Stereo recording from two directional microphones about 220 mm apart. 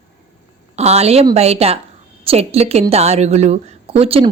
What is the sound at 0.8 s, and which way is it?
A woman's voice, 30° right (ahead or behind).